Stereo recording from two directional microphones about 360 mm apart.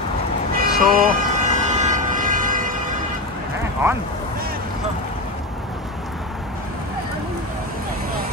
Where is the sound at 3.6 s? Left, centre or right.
Centre.